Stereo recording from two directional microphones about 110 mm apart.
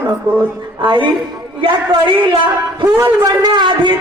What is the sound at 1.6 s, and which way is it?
Speech, 50° right (ahead or behind).